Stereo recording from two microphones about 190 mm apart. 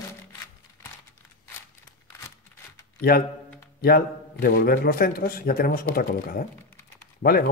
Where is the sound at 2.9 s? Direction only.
50° left (ahead or behind).